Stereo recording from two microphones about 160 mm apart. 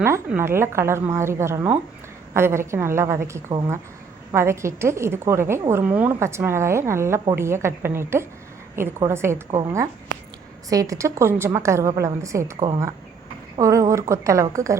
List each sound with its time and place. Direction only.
0.3 s a woman's voice: 15° right (ahead or behind)
10.7 s a woman's voice: 20° right (ahead or behind)
13.6 s a woman's voice: 20° right (ahead or behind)